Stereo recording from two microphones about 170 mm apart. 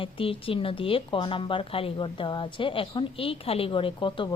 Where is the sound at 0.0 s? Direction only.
30° left (ahead or behind).